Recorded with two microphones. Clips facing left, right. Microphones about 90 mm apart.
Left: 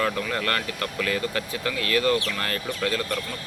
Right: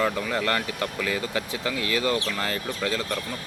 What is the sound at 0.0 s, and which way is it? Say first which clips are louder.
Speech: right 1 dB; 15° right (ahead or behind).